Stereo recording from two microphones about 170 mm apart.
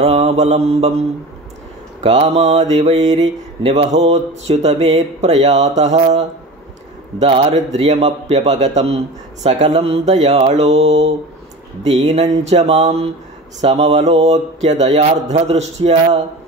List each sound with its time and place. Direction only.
0.0 s a man's voice: 40° right (ahead or behind)
2.0 s a man's voice: 40° right (ahead or behind)
3.1 s a sound: 45° right (ahead or behind)
4.0 s a man's voice: 40° right (ahead or behind)
12.1 s a sound: 45° right (ahead or behind)
13.6 s a man's voice: 40° right (ahead or behind)